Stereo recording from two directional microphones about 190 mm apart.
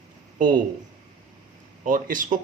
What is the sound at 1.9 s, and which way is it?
Speech, 45° right (ahead or behind).